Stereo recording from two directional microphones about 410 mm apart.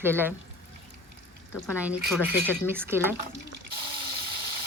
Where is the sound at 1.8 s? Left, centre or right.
Centre.